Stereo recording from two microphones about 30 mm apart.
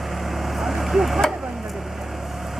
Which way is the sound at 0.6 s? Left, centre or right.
Centre.